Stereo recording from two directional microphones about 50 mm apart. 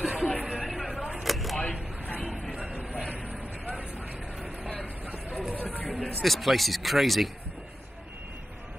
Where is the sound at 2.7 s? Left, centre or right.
Right.